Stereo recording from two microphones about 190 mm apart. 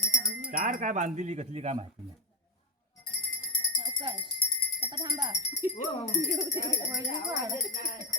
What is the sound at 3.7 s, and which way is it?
Music, 25° right (ahead or behind).